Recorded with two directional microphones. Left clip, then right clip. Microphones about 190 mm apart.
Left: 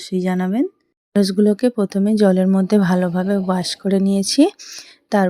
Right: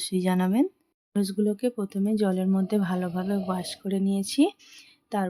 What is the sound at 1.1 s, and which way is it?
Speech, 30° left (ahead or behind).